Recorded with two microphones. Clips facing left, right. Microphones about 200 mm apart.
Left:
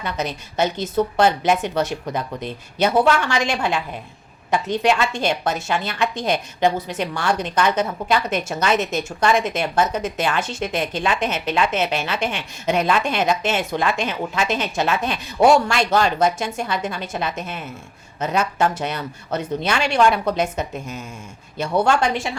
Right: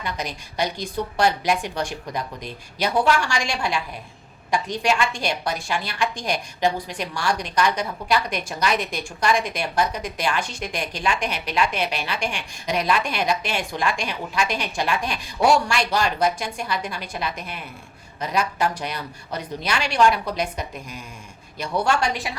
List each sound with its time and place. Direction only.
0.2 s speech: 25° left (ahead or behind)